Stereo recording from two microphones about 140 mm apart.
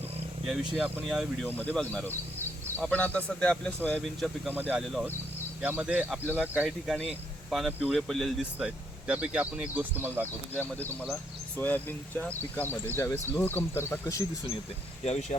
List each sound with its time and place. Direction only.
0.4 s speech: centre (ahead or behind)
1.5 s speech: 15° left (ahead or behind)
4.4 s speech: 10° right (ahead or behind)
6.7 s speech: centre (ahead or behind)
10.6 s speech: 15° left (ahead or behind)
15.0 s speech: 50° left (ahead or behind)